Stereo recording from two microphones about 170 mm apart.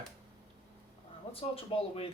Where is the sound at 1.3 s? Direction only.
35° left (ahead or behind).